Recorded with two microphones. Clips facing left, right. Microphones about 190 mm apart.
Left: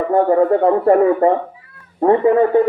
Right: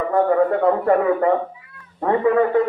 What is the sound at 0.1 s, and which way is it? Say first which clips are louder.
A child's voice: left 4 dB; 30° left (ahead or behind).